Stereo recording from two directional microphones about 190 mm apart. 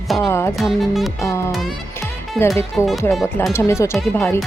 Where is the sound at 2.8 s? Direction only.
15° left (ahead or behind).